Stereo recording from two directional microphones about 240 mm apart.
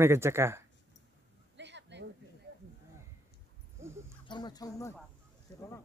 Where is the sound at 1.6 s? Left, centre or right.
Right.